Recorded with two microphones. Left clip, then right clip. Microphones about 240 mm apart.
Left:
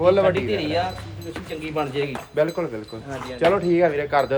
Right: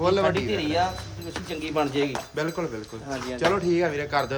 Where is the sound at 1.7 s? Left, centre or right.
Right.